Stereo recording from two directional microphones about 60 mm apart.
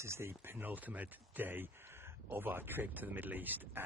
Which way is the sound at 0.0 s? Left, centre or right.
Right.